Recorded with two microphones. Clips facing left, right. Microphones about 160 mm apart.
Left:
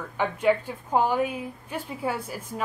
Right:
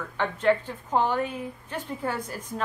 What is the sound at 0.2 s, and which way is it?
A woman's voice, 10° left (ahead or behind).